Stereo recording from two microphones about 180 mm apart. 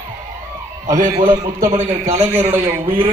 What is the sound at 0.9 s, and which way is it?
A man's voice, 40° right (ahead or behind).